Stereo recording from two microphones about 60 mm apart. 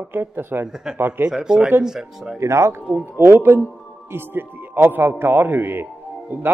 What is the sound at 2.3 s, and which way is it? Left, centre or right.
Speech, right.